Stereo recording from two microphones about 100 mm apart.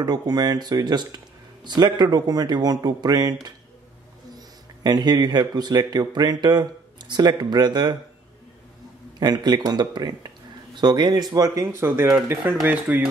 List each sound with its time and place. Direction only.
0.0 s speech: 40° right (ahead or behind)
4.4 s a man's voice: 40° right (ahead or behind)
9.2 s speech: 45° right (ahead or behind)
11.6 s speech: 25° right (ahead or behind)